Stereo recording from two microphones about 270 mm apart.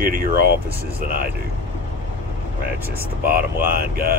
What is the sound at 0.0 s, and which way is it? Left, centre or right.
Air conditioning, right.